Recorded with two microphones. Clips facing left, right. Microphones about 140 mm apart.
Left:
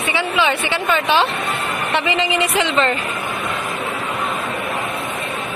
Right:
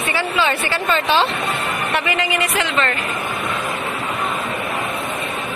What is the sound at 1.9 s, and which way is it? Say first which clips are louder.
A woman's voice: left 3 dB; 25° left (ahead or behind).